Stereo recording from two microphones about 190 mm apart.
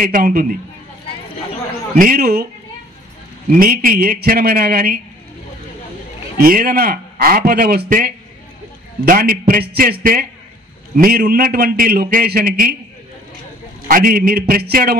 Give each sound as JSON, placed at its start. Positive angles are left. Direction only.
{"t": 0.0, "sound": "a man's voice", "side_deg": -50}
{"t": 2.0, "sound": "a man's voice", "side_deg": -50}
{"t": 3.5, "sound": "a man's voice", "side_deg": -50}
{"t": 6.3, "sound": "a man's voice", "side_deg": -50}
{"t": 13.8, "sound": "a man's voice", "side_deg": -50}